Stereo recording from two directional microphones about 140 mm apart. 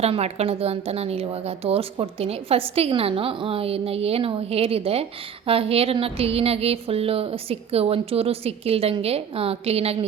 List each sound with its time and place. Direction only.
0.0 s a woman's voice: 50° right (ahead or behind)